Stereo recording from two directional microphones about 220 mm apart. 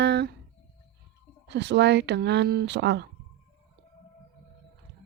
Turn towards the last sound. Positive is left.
turn(degrees=-50)  # may be behind; listen again after turning